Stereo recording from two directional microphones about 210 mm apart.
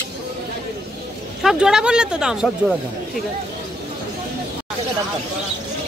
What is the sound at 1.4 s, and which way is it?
A woman's voice, 5° right (ahead or behind).